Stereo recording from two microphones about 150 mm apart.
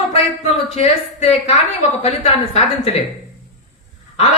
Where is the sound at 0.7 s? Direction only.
45° left (ahead or behind).